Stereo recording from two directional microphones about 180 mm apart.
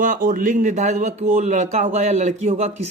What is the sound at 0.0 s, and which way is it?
Speech, 50° right (ahead or behind).